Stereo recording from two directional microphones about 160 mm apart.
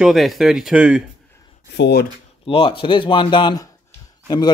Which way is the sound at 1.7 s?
85° left.